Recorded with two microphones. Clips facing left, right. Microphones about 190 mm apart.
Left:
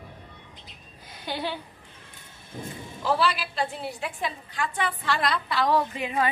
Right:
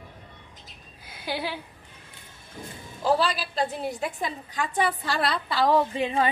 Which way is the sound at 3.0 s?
40° right (ahead or behind).